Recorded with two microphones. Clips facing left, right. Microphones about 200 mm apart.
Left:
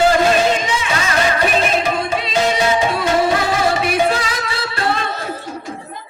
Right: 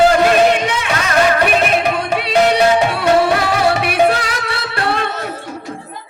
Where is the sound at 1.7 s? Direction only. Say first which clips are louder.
Right 2 dB; 65° right (ahead or behind).